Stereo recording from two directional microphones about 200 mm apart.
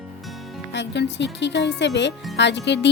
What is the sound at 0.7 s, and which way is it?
Speech, 60° left (ahead or behind).